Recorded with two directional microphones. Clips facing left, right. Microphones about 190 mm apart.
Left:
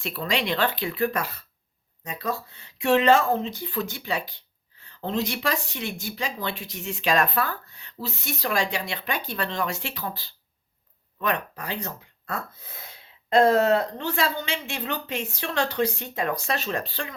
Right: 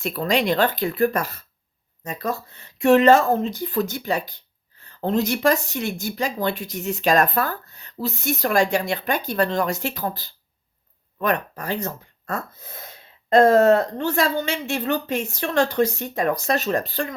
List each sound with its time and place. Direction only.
0.0 s speech: 45° right (ahead or behind)